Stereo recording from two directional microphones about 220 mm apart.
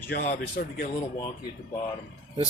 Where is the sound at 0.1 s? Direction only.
40° left (ahead or behind).